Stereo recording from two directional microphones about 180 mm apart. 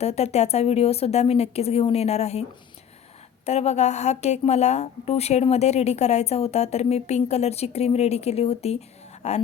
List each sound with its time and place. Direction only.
0.0 s a woman's voice: 35° left (ahead or behind)
3.4 s a woman's voice: 35° left (ahead or behind)